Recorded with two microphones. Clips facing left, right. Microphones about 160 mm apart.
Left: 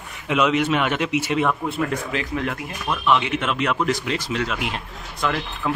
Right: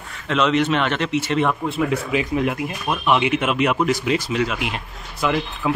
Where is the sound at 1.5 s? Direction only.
5° right (ahead or behind).